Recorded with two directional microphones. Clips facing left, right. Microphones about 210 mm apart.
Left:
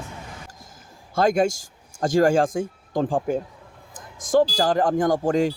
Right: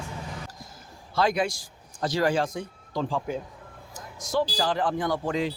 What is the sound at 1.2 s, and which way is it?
A man's voice, 45° left (ahead or behind).